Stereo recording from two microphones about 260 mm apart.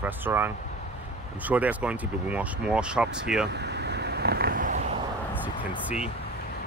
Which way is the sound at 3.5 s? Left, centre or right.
Right.